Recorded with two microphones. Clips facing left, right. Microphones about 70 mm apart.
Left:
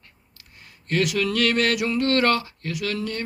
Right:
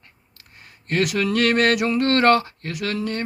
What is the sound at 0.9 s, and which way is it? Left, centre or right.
Mantra, right.